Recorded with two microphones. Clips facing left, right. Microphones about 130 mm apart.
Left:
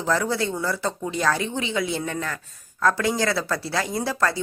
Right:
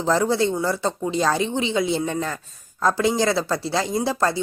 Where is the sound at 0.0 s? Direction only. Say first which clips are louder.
Right 4 dB; 25° right (ahead or behind).